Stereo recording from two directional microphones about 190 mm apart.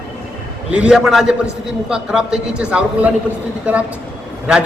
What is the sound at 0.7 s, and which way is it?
A man's voice, 5° right (ahead or behind).